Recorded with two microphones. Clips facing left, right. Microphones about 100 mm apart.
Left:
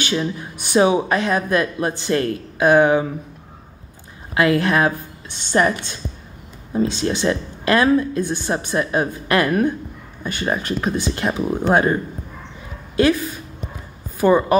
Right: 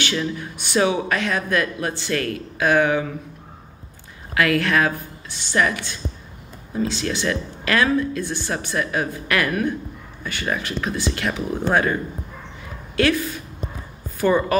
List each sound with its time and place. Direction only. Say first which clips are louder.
0.1 s a woman's voice: left 2 dB; 25° left (ahead or behind)
4.4 s a woman's voice: left 2 dB; 20° left (ahead or behind)
6.7 s a woman's voice: left 4 dB; 25° left (ahead or behind)